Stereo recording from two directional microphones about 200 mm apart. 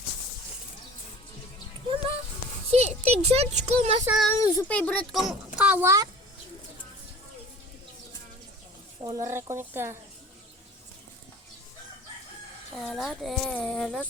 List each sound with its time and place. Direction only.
2.6 s a sound: 30° right (ahead or behind)
4.0 s speech: 5° right (ahead or behind)
4.4 s a child's voice: 20° left (ahead or behind)
4.7 s speech: 5° left (ahead or behind); by 6.1 s 15° right (ahead or behind)
9.0 s speech: 20° right (ahead or behind)
12.7 s speech: centre (ahead or behind)